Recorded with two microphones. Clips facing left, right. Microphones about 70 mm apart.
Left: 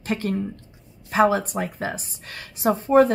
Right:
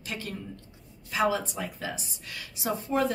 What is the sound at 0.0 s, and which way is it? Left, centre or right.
Speech, left.